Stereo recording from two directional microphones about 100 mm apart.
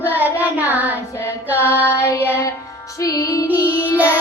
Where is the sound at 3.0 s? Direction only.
35° left (ahead or behind).